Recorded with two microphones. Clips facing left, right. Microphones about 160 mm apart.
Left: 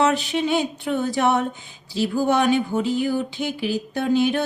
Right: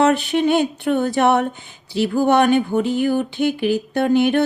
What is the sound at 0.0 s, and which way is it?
Speech, 55° right (ahead or behind).